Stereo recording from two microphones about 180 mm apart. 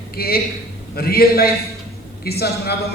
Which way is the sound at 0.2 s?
55° left (ahead or behind).